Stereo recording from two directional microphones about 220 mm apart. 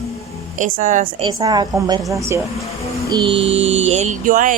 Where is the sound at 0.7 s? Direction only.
35° right (ahead or behind).